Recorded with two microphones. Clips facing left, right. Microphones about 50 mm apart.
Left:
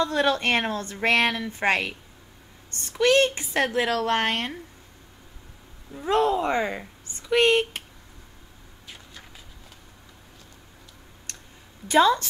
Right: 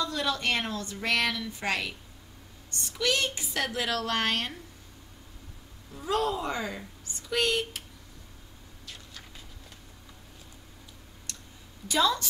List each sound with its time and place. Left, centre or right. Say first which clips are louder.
0.0 s speech: left 7 dB; left
5.9 s speech: left 6 dB; left
11.9 s speech: left 7 dB; left